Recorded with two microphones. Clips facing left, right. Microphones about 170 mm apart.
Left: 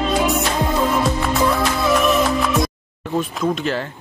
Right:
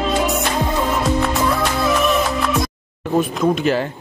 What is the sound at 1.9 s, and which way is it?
Music, centre (ahead or behind).